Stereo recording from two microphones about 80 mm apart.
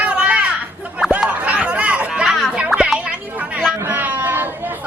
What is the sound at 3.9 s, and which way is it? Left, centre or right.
Chatter, right.